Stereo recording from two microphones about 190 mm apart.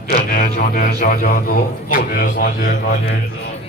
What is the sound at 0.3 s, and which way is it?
A man's voice, 45° left (ahead or behind).